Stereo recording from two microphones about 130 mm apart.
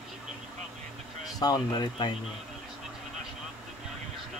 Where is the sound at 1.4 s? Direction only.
30° left (ahead or behind).